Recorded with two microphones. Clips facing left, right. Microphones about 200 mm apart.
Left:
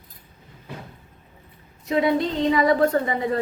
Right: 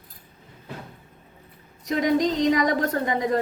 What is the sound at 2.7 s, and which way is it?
Speech, 40° right (ahead or behind).